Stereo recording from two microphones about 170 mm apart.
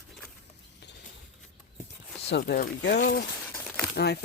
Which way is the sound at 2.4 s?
55° left (ahead or behind).